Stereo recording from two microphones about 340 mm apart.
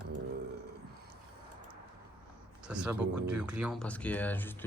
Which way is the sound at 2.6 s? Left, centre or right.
Centre.